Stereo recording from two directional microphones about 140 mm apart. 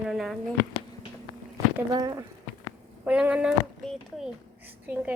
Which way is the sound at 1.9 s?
25° right (ahead or behind).